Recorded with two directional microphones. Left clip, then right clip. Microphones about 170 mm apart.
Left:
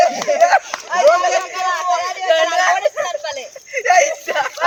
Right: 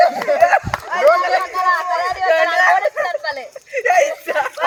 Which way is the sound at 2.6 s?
20° right (ahead or behind).